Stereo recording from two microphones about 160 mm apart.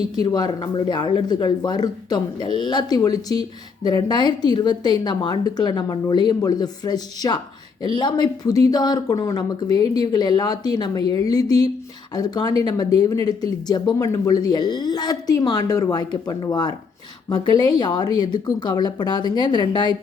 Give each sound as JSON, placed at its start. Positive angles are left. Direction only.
{"t": 0.2, "sound": "a woman's voice", "side_deg": 25}